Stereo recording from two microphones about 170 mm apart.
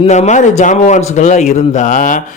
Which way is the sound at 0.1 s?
45° left (ahead or behind).